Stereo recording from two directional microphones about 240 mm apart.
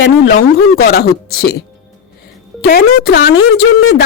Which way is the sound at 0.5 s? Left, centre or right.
Left.